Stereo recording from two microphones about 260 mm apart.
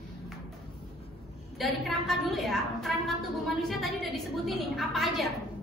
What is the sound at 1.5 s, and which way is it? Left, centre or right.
A woman's voice, centre.